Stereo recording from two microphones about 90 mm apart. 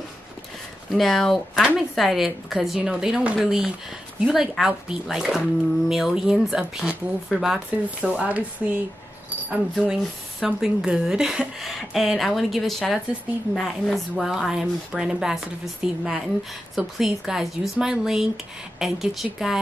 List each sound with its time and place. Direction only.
0.8 s speech: centre (ahead or behind)
8.2 s speech: 15° right (ahead or behind)